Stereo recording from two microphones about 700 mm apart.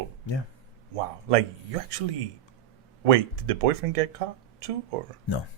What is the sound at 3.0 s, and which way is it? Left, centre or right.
Speech, right.